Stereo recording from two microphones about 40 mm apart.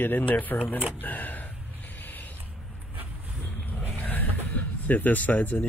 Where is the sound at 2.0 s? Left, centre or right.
Left.